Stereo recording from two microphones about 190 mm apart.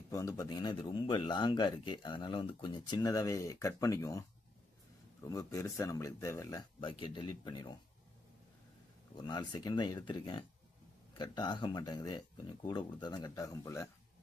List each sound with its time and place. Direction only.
0.1 s speech: 15° left (ahead or behind)
5.2 s speech: 15° left (ahead or behind)
9.1 s speech: 20° left (ahead or behind)